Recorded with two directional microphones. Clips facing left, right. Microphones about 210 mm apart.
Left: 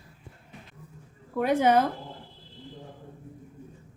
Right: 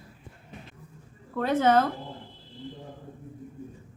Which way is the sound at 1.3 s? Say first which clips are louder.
Even; 15° left (ahead or behind).